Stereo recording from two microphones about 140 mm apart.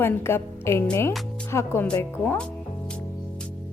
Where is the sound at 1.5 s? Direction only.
20° left (ahead or behind).